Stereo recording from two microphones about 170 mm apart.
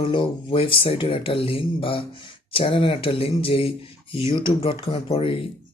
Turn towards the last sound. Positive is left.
turn(degrees=35)  # may be behind; listen again after turning